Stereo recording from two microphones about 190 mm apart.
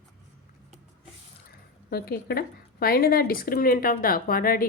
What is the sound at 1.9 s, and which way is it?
A woman's voice, 55° left (ahead or behind).